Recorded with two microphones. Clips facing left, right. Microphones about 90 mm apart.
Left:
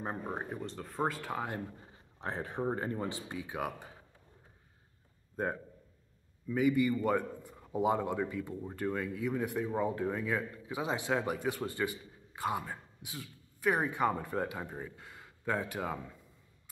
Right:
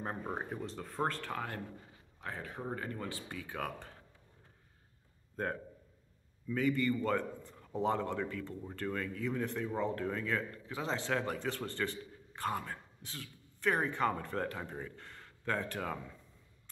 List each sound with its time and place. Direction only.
0.0 s speech: 5° left (ahead or behind)
1.9 s speech: 30° left (ahead or behind); by 4.0 s 10° left (ahead or behind)
5.3 s a man's voice: 10° left (ahead or behind)